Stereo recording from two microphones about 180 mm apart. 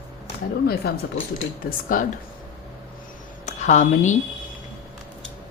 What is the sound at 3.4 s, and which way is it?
Speech, 40° left (ahead or behind).